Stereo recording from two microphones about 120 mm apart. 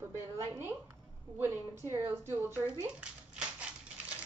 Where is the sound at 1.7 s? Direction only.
25° right (ahead or behind).